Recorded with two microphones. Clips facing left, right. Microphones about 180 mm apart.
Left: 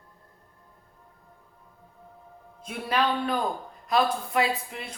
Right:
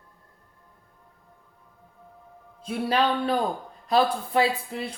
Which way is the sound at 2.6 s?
30° right (ahead or behind).